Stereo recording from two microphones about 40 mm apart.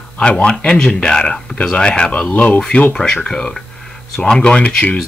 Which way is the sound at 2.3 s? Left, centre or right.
Left.